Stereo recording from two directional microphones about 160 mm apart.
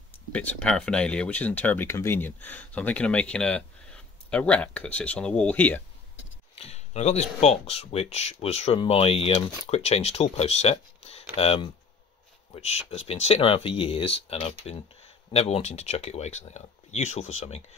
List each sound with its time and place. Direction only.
0.3 s speech: 10° left (ahead or behind)
6.5 s speech: 40° left (ahead or behind)